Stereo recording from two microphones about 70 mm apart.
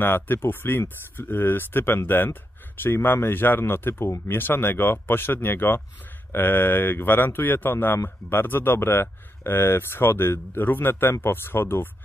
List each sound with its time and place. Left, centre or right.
0.0 s speech: left